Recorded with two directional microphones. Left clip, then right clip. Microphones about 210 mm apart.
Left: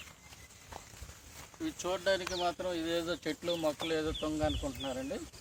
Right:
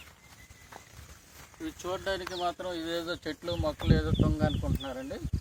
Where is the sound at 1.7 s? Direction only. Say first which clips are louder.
Left 1 dB; 45° left (ahead or behind).